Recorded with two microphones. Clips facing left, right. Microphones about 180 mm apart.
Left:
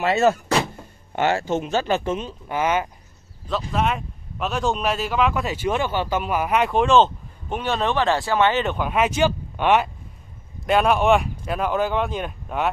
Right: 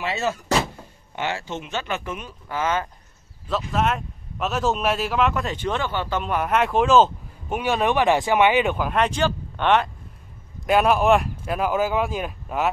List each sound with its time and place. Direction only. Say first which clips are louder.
0.0 s speech: left 7 dB; 50° left (ahead or behind); by 2.9 s 15° left (ahead or behind)
3.4 s a man's voice: even; centre (ahead or behind)
10.7 s a man's voice: even; centre (ahead or behind)